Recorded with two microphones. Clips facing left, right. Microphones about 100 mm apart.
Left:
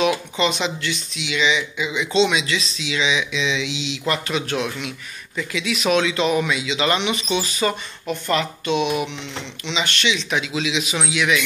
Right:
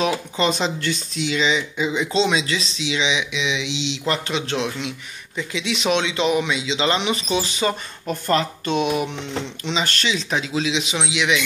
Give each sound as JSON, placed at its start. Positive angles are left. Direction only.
{"t": 0.0, "sound": "speech", "side_deg": -35}
{"t": 8.1, "sound": "a man's voice", "side_deg": -40}